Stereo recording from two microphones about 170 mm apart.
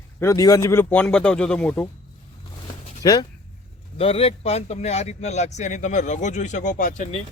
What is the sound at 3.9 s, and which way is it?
A man's voice, 35° left (ahead or behind).